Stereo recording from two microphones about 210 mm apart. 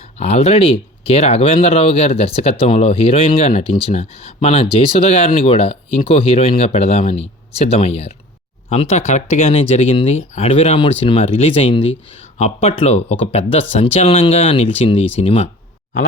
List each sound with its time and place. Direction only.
0.0 s speech: 30° left (ahead or behind)